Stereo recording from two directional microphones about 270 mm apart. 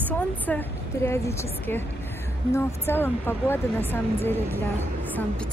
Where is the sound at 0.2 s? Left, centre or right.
Centre.